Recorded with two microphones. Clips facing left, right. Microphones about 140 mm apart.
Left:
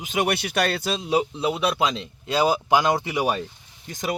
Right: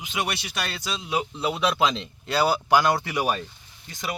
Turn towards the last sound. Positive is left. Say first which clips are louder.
# left 5 dB
turn(degrees=40)  # may be behind; listen again after turning